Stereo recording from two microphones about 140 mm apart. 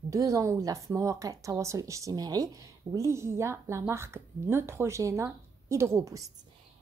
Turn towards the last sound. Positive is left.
turn(degrees=-20)  # may be behind; listen again after turning